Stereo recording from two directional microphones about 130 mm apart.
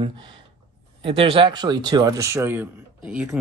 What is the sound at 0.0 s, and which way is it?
Speech, 40° right (ahead or behind).